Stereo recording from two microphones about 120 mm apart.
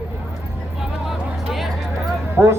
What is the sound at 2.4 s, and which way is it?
Speech, 20° right (ahead or behind).